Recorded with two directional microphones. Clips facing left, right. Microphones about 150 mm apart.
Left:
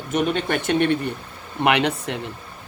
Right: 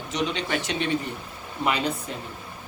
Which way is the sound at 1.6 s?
70° left (ahead or behind).